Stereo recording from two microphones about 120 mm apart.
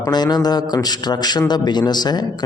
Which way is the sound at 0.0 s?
35° left (ahead or behind).